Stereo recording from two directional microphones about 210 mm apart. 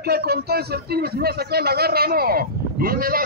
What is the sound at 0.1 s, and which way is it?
A man's voice, 50° right (ahead or behind).